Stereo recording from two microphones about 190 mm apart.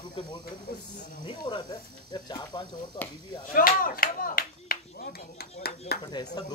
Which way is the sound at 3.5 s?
45° left (ahead or behind).